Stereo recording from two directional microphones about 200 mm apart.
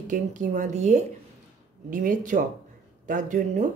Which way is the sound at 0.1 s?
40° right (ahead or behind).